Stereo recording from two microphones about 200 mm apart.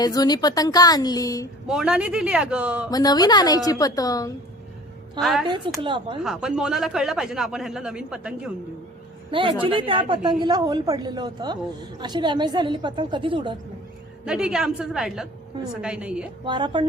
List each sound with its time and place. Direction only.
0.0 s a woman's voice: 20° left (ahead or behind)
1.6 s speech: 5° right (ahead or behind)
2.9 s a woman's voice: 20° left (ahead or behind)
5.2 s speech: centre (ahead or behind)
5.5 s a woman's voice: 25° right (ahead or behind)
6.2 s speech: centre (ahead or behind)
9.3 s a woman's voice: 25° right (ahead or behind)
14.3 s speech: 5° right (ahead or behind)
16.4 s a woman's voice: 25° right (ahead or behind)